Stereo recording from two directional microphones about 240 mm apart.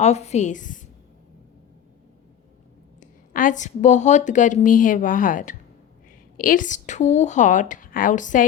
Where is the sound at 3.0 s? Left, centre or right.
Left.